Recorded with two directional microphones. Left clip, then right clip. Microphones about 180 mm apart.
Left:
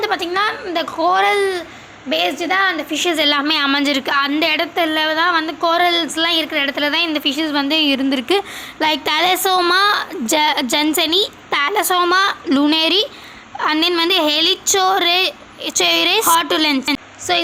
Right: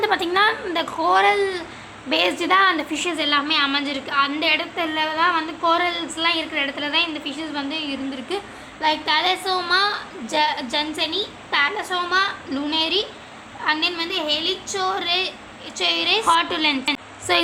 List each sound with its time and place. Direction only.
0.0 s a woman's voice: 15° left (ahead or behind); by 1.6 s 30° left (ahead or behind)
2.0 s a woman's voice: 15° left (ahead or behind)
3.2 s a woman's voice: 40° left (ahead or behind)
17.3 s a woman's voice: 15° left (ahead or behind)